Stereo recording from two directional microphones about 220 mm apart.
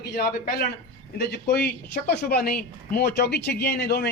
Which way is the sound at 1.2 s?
50° left (ahead or behind).